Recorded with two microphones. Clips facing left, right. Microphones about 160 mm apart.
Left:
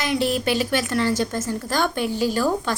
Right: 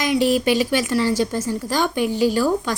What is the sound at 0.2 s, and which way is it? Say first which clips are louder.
Speech: right 5 dB; 40° right (ahead or behind).